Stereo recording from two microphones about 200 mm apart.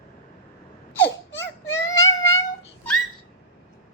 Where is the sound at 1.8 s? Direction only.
15° left (ahead or behind).